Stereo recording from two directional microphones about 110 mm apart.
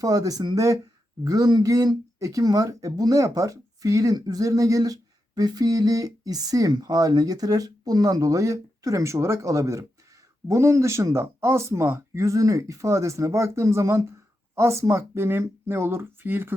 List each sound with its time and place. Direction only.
0.0 s speech: 35° right (ahead or behind)